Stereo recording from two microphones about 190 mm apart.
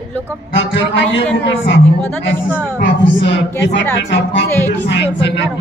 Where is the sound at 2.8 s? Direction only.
70° left (ahead or behind).